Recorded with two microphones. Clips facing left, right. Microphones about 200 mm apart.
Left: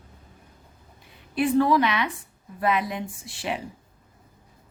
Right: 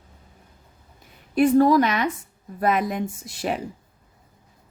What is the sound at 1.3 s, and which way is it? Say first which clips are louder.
A woman's voice: right 4 dB; 45° right (ahead or behind).